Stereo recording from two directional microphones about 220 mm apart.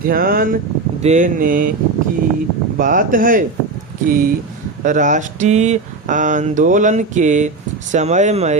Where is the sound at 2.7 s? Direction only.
40° right (ahead or behind).